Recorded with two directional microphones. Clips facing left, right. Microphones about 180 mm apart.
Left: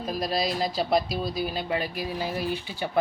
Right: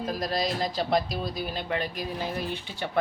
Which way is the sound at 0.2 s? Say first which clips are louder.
Left 3 dB; 5° left (ahead or behind).